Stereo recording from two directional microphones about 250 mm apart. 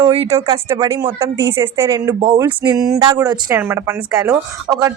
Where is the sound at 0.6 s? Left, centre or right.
Centre.